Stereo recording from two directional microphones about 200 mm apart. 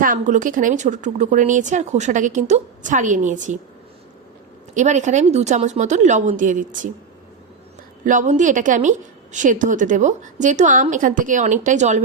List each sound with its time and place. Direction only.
0.0 s speech: 40° right (ahead or behind)
4.7 s speech: 35° right (ahead or behind)
8.0 s speech: 40° right (ahead or behind)